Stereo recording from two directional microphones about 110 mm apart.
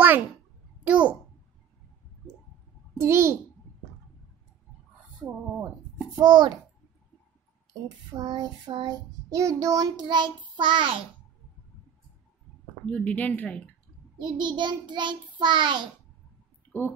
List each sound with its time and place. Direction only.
0.0 s a sound: 15° right (ahead or behind)
0.8 s a child's voice: 10° right (ahead or behind)
3.0 s a child's voice: 25° right (ahead or behind)
5.2 s speech: 5° right (ahead or behind)
6.1 s child singing: 40° right (ahead or behind)
8.1 s child singing: 40° right (ahead or behind)
12.8 s a woman's voice: 10° left (ahead or behind)
14.3 s child singing: 45° right (ahead or behind)